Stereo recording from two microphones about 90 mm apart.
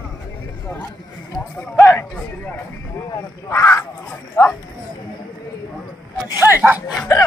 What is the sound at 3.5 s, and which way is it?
Fowl, 35° left (ahead or behind).